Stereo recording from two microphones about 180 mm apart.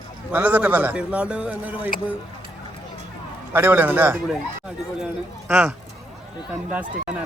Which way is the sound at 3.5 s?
10° right (ahead or behind).